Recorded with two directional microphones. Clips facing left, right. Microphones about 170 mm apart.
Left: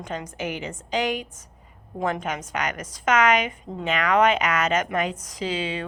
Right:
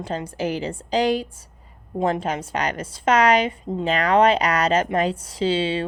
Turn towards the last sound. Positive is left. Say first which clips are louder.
# right 6 dB
turn(degrees=-30)  # may be behind; listen again after turning